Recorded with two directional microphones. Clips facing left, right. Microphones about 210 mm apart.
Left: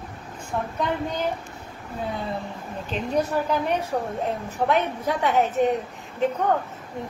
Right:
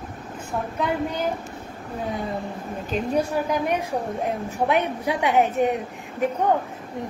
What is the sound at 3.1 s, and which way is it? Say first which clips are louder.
A woman's voice: left 1 dB; 10° right (ahead or behind).